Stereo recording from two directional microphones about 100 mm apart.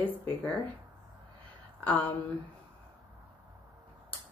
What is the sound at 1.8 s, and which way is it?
Speech, 15° left (ahead or behind).